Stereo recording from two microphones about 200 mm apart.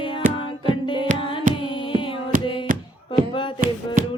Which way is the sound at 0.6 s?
25° left (ahead or behind).